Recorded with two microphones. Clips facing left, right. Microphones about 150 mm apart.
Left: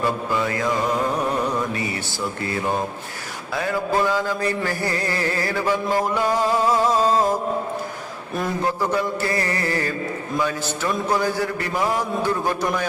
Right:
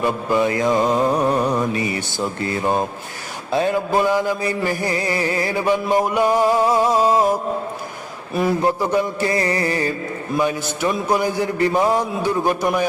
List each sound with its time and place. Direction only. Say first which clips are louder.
0.0 s music: right 4 dB; 20° right (ahead or behind)
3.5 s mantra: right 4 dB; 20° right (ahead or behind)
8.6 s music: right 4 dB; 15° right (ahead or behind)
11.1 s mantra: right 2 dB; 15° right (ahead or behind)